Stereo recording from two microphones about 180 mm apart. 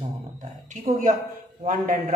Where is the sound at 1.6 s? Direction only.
45° right (ahead or behind).